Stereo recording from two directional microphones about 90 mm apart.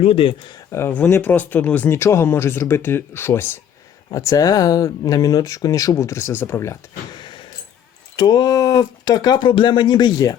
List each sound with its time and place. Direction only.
0.1 s speech: 85° left
0.7 s speech: 25° left (ahead or behind)
1.9 s speech: 30° left (ahead or behind)
4.1 s speech: 40° left (ahead or behind)
7.1 s a sound: 60° left (ahead or behind)
8.1 s speech: 50° left (ahead or behind)
9.4 s speech: 65° left (ahead or behind); by 10.3 s 45° left (ahead or behind)